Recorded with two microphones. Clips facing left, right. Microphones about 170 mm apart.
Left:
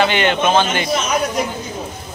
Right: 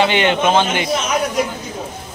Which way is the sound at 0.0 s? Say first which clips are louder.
Right 1 dB; 20° right (ahead or behind).